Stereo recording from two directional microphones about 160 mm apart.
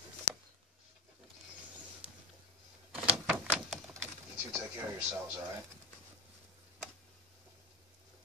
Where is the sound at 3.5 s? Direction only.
Centre (ahead or behind).